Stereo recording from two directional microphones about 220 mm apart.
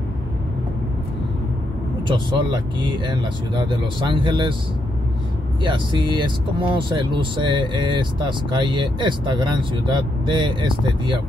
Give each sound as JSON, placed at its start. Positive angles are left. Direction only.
{"t": 2.0, "sound": "speech", "side_deg": -20}
{"t": 5.6, "sound": "speech", "side_deg": -20}